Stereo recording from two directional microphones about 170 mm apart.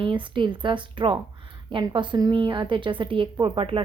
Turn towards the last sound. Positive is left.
turn(degrees=-30)  # may be behind; listen again after turning